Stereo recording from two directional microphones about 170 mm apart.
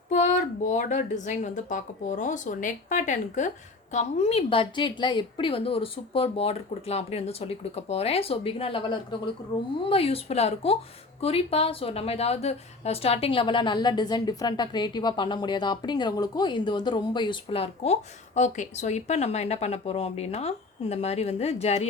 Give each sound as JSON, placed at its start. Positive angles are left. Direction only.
{"t": 0.1, "sound": "a woman's voice", "side_deg": 45}